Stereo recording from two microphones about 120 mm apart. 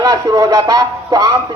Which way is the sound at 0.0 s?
35° right (ahead or behind).